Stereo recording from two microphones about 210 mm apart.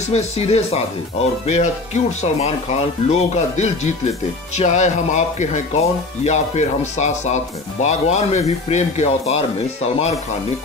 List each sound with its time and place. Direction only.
0.1 s speech: 30° left (ahead or behind)